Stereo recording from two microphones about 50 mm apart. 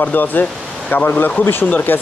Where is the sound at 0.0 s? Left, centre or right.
Left.